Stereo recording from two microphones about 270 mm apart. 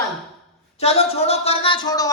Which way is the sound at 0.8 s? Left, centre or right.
Left.